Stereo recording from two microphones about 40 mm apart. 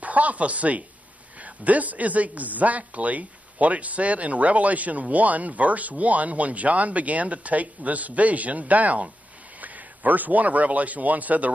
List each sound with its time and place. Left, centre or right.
0.0 s a man's voice: right